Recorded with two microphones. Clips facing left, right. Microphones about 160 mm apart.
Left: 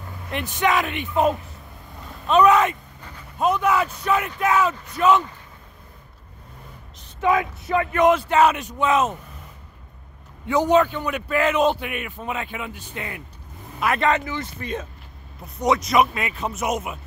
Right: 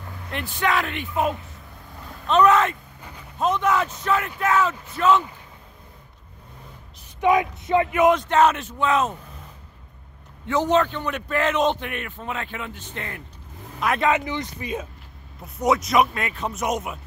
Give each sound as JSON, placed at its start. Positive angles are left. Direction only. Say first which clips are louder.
{"t": 0.3, "sound": "speech", "louder": "left 2 dB", "side_deg": 20}
{"t": 2.0, "sound": "a man's voice", "louder": "left 1 dB", "side_deg": 10}
{"t": 7.2, "sound": "speech", "louder": "right 1 dB", "side_deg": -20}
{"t": 7.9, "sound": "a man's voice", "louder": "left 2 dB", "side_deg": -5}
{"t": 8.2, "sound": "a man's voice", "louder": "left 1 dB", "side_deg": 10}
{"t": 10.4, "sound": "a man's voice", "louder": "left 2 dB", "side_deg": 10}
{"t": 14.1, "sound": "a man's voice", "louder": "even", "side_deg": -20}